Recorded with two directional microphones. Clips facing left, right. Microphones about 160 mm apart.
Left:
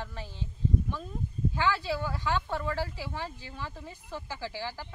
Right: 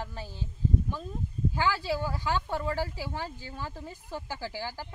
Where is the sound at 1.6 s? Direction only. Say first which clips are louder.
Even; 35° right (ahead or behind).